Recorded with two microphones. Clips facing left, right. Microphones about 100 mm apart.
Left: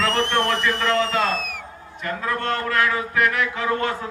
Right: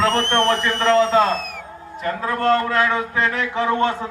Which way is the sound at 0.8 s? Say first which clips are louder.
Right 6 dB; 35° right (ahead or behind).